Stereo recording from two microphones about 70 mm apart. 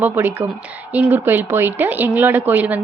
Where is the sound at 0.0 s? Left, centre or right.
Right.